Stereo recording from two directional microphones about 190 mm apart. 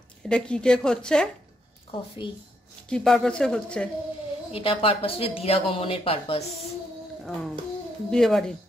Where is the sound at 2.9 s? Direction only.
5° left (ahead or behind).